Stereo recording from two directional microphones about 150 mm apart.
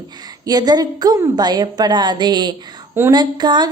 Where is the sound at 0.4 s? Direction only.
25° right (ahead or behind).